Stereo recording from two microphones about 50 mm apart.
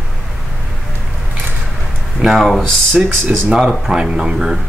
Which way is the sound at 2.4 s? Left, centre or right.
Centre.